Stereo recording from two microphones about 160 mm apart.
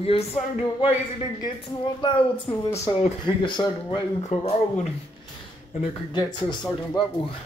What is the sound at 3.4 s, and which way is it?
Speech, 30° left (ahead or behind).